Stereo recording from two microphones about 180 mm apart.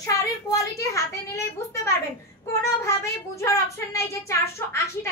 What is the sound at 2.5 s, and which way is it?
Speech, 15° left (ahead or behind).